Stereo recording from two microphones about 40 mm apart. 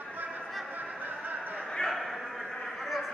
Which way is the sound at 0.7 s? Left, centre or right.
Right.